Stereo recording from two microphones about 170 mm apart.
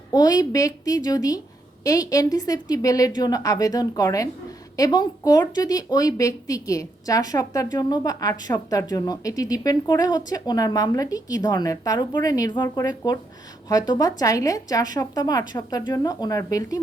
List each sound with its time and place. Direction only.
0.1 s a woman's voice: 20° left (ahead or behind)